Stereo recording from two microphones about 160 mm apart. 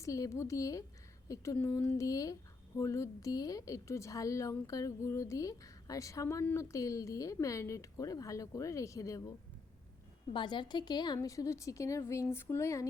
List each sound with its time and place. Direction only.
0.0 s a woman's voice: 20° left (ahead or behind)
10.3 s a woman's voice: 30° left (ahead or behind)